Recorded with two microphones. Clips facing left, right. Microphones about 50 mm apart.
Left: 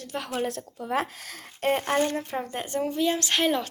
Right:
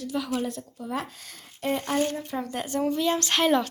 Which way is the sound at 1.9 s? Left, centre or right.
Left.